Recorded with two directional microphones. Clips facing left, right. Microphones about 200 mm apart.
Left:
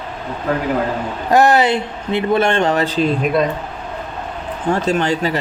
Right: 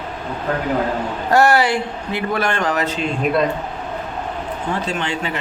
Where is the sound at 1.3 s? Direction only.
20° left (ahead or behind); by 3.2 s 35° left (ahead or behind).